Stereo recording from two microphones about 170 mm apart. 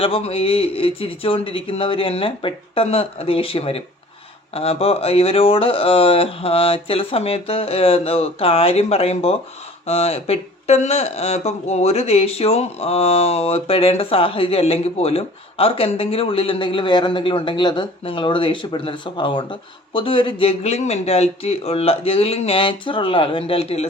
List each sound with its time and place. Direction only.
0.0 s speech: 35° left (ahead or behind)